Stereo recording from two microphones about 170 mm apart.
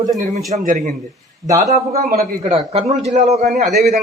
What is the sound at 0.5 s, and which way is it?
Speech, 50° right (ahead or behind).